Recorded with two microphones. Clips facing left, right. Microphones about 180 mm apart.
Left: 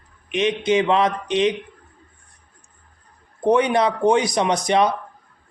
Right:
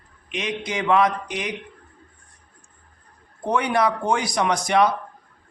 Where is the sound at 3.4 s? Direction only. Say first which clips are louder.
Left 4 dB; 20° left (ahead or behind).